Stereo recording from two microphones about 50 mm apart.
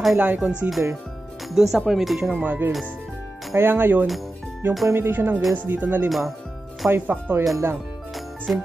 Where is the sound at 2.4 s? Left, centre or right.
Right.